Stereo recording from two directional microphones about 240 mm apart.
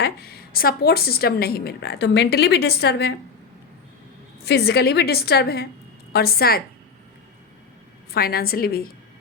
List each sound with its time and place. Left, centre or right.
0.0 s a woman's voice: left
4.4 s a woman's voice: left
8.1 s a woman's voice: left